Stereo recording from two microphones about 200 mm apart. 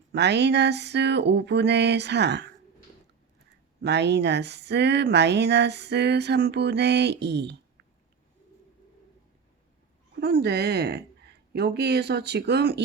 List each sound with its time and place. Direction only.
0.1 s speech: 60° right (ahead or behind)
3.8 s speech: 60° right (ahead or behind)
10.2 s a woman's voice: 55° right (ahead or behind)